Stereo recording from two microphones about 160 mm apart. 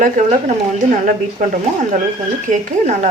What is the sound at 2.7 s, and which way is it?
Speech, 50° right (ahead or behind).